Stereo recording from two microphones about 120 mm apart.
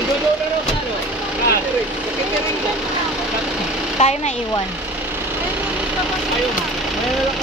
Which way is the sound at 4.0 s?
70° left (ahead or behind).